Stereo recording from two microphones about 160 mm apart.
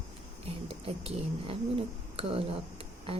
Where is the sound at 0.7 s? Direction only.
35° right (ahead or behind).